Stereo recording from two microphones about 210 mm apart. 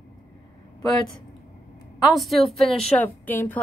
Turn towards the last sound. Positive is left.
turn(degrees=10)  # may be behind; listen again after turning